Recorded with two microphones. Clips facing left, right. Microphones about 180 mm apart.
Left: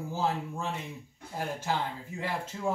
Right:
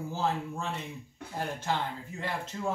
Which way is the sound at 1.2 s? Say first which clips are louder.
Right 3 dB; 75° right (ahead or behind).